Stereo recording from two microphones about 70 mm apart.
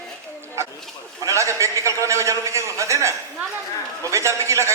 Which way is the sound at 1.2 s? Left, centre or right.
Right.